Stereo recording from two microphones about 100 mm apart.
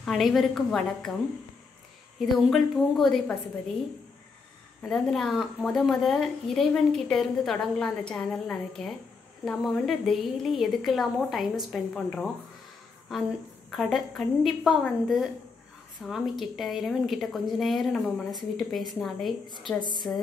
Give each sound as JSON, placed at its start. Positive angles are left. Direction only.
{"t": 0.0, "sound": "a woman's voice", "side_deg": 0}
{"t": 2.1, "sound": "a woman's voice", "side_deg": 0}
{"t": 4.8, "sound": "a woman's voice", "side_deg": 5}
{"t": 13.7, "sound": "a woman's voice", "side_deg": 0}
{"t": 19.6, "sound": "a woman's voice", "side_deg": -50}